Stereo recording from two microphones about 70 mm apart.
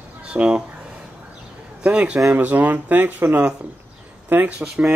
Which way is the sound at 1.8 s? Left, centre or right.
Centre.